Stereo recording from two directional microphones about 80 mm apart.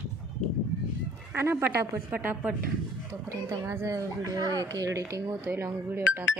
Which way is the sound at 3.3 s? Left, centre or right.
Right.